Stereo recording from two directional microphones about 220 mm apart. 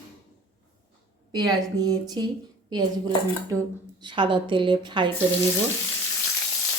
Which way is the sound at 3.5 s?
15° right (ahead or behind).